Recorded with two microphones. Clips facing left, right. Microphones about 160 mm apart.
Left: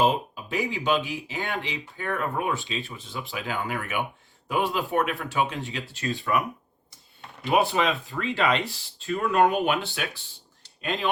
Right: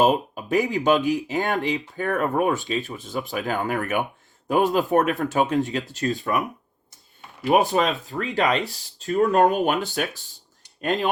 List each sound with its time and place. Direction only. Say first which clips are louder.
0.0 s speech: right 4 dB; 50° right (ahead or behind)
7.4 s speech: right 3 dB; 40° right (ahead or behind)